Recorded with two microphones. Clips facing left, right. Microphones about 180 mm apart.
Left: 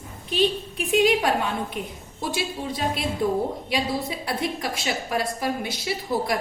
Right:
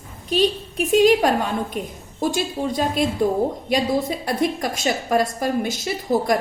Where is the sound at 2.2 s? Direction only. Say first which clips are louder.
Right 6 dB; 45° right (ahead or behind).